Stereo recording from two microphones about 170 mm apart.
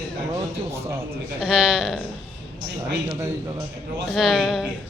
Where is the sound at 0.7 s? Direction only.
15° right (ahead or behind).